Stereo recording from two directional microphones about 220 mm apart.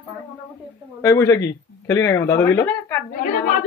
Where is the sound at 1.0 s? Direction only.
15° left (ahead or behind).